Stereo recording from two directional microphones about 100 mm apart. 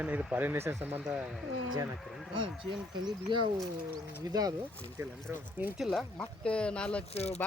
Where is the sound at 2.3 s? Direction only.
55° right (ahead or behind).